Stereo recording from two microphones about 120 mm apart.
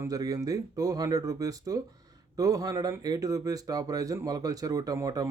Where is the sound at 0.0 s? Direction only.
30° right (ahead or behind).